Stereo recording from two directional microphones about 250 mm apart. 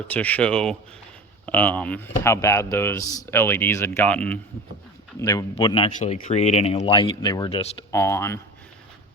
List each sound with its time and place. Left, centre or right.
0.1 s speech: centre; by 7.8 s left
7.9 s speech: centre